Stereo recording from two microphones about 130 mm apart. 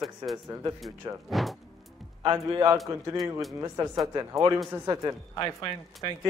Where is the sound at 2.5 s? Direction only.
25° right (ahead or behind).